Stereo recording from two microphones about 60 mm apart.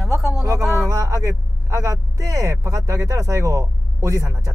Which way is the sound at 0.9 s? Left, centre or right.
Right.